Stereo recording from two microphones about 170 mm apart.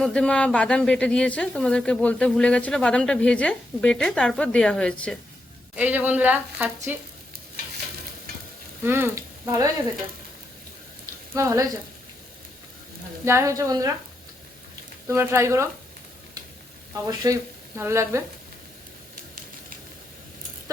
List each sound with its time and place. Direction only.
0.0 s a woman's voice: 5° left (ahead or behind)
5.7 s speech: 10° right (ahead or behind)
8.8 s speech: 15° right (ahead or behind)
11.3 s a woman's voice: 20° right (ahead or behind)
13.2 s a woman's voice: 15° right (ahead or behind)
15.0 s speech: 15° right (ahead or behind)
16.9 s a woman's voice: 20° right (ahead or behind)